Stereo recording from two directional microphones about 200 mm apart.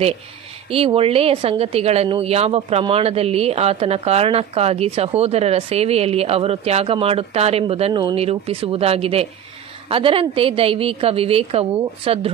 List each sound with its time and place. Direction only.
0.7 s speech: 30° right (ahead or behind)